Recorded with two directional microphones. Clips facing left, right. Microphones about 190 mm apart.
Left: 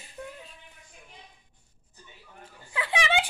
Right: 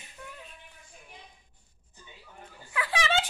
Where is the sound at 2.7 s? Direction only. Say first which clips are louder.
Left 1 dB; 25° left (ahead or behind).